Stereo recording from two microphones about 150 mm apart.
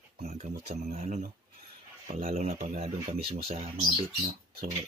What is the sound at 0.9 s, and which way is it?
A man's voice, 55° right (ahead or behind).